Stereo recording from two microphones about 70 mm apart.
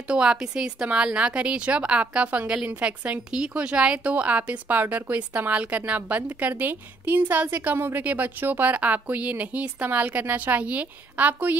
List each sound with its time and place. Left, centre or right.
0.1 s a woman's voice: centre